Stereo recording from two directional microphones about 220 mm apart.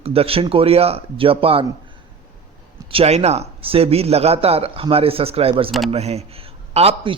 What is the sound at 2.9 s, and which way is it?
A man's voice, 30° right (ahead or behind).